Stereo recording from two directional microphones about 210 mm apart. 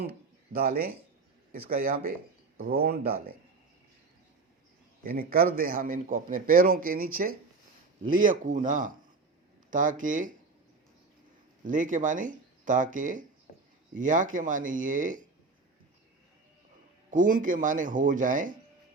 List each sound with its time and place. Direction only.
0.1 s a sound: 45° right (ahead or behind)
1.7 s a man's voice: 45° right (ahead or behind)
5.0 s a man's voice: 45° right (ahead or behind)
8.2 s speech: 40° right (ahead or behind)
11.6 s speech: 40° right (ahead or behind)
17.1 s speech: 40° right (ahead or behind)